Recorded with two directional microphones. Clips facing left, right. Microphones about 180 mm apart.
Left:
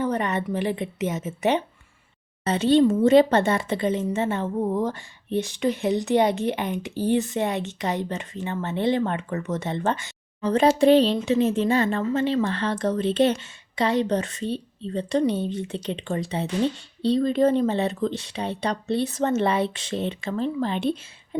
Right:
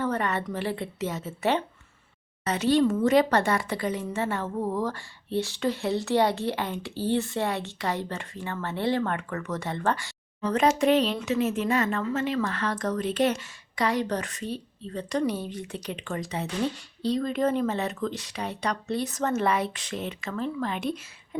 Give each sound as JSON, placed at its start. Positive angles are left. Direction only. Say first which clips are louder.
{"t": 0.0, "sound": "a woman's voice", "louder": "left 3 dB", "side_deg": 20}